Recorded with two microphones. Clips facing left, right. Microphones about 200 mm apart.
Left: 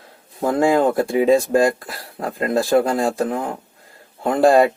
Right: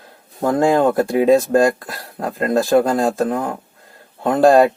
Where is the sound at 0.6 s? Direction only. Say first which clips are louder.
Right 1 dB; centre (ahead or behind).